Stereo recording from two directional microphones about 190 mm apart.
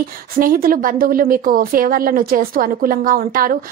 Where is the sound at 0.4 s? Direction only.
50° right (ahead or behind).